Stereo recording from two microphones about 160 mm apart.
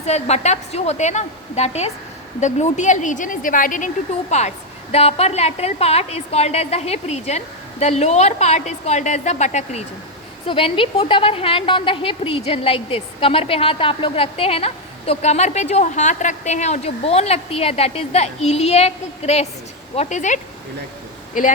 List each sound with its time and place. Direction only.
0.0 s a woman's voice: 45° left (ahead or behind)
10.4 s a woman's voice: 35° left (ahead or behind); by 21.5 s 55° left (ahead or behind)